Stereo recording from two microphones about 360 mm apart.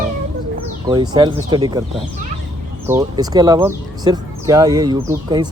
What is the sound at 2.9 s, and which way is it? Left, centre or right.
Speech, centre.